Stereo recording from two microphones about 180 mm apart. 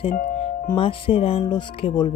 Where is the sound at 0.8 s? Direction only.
30° left (ahead or behind).